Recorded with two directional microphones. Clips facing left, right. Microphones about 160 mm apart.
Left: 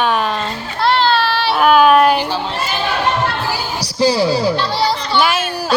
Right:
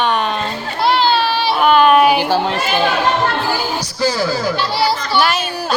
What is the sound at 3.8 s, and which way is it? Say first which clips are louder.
Speech: left 3 dB; 30° left (ahead or behind).